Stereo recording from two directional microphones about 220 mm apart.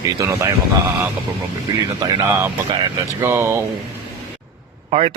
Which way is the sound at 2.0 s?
20° right (ahead or behind).